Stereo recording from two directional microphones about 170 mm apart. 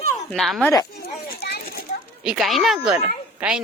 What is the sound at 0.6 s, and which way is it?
Speech, 20° left (ahead or behind).